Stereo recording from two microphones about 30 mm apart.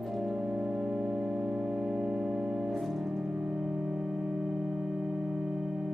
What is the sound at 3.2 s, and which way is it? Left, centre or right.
Music, centre.